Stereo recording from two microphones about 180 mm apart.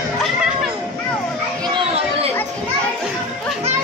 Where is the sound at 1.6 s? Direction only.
30° right (ahead or behind).